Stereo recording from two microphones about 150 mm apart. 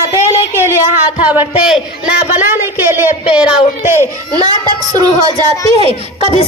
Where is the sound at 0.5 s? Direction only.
15° right (ahead or behind).